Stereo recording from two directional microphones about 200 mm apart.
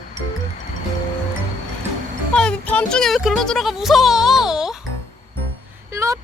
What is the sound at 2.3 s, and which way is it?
Speech, 5° left (ahead or behind).